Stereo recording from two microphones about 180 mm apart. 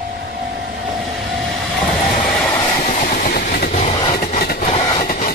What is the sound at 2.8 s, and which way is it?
Vehicle, 40° left (ahead or behind).